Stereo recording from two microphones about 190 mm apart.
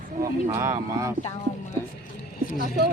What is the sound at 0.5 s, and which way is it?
Speech, 15° right (ahead or behind).